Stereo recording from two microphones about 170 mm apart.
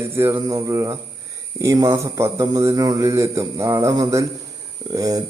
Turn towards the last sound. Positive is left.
turn(degrees=-20)  # may be behind; listen again after turning